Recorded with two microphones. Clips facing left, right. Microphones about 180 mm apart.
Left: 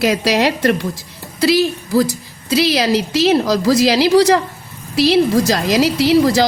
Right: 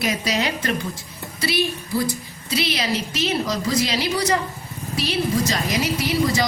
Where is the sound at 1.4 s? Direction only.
90° left.